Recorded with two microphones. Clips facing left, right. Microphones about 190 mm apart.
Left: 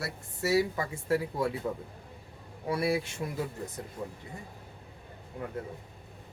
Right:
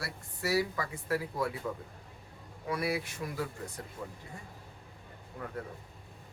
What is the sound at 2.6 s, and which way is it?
Speech, 30° left (ahead or behind).